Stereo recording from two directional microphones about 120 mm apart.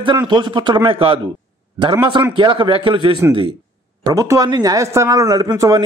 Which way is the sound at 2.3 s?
45° right (ahead or behind).